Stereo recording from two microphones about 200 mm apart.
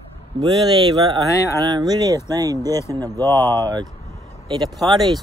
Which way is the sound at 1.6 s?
20° right (ahead or behind).